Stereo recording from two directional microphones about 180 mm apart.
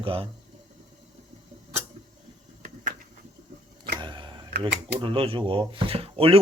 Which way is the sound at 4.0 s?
25° right (ahead or behind).